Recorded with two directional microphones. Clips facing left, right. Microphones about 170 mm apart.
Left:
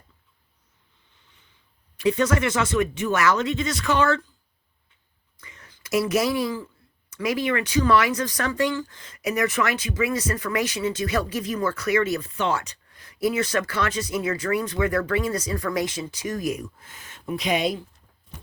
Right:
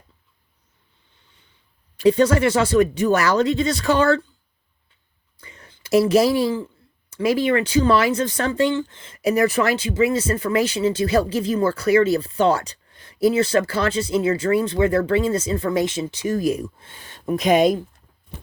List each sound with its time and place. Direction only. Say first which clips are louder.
2.0 s speech: right 6 dB; 30° right (ahead or behind)
5.4 s a sound: right 3 dB; 30° right (ahead or behind)
7.1 s speech: right 6 dB; 30° right (ahead or behind); by 17.8 s 45° right (ahead or behind)